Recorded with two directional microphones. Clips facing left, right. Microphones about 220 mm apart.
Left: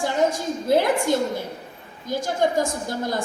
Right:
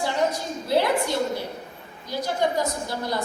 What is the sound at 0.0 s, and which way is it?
A woman's voice, 50° left (ahead or behind).